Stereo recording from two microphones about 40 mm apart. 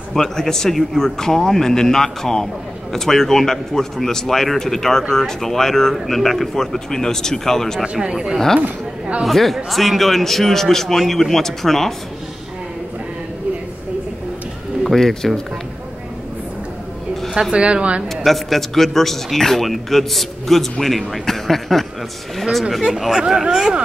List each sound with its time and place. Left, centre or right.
0.4 s speech: centre
7.8 s speech: right
9.2 s speech: centre
14.9 s speech: centre
17.5 s speech: right
18.0 s speech: centre